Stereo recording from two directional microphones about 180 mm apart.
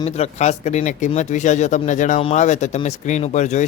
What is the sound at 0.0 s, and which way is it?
Speech, 40° left (ahead or behind).